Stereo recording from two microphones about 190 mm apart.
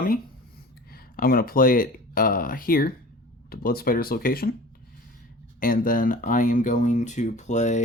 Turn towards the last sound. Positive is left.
turn(degrees=40)  # may be behind; listen again after turning